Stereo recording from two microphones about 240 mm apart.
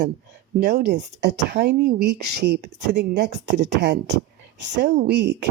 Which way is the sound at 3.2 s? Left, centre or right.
Right.